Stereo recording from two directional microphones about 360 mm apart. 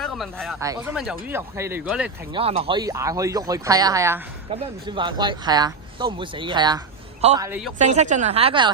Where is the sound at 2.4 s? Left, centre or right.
Centre.